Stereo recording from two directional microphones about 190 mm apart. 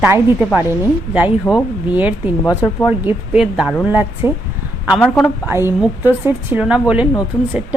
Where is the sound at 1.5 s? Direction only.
15° left (ahead or behind).